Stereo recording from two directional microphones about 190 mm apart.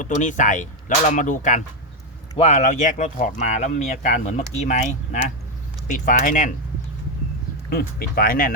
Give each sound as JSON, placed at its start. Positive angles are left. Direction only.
{"t": 0.0, "sound": "speech", "side_deg": 40}
{"t": 7.7, "sound": "speech", "side_deg": 55}